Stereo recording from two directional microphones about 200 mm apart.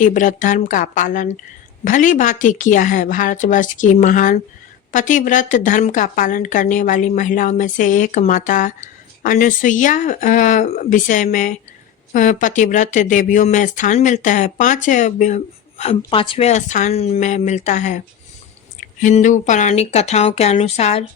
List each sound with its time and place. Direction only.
0.0 s speech: 40° left (ahead or behind)